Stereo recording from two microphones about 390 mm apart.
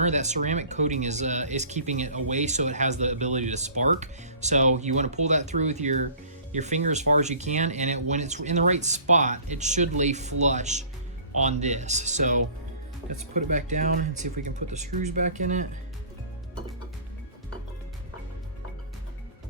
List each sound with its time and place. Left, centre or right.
0.0 s speech: centre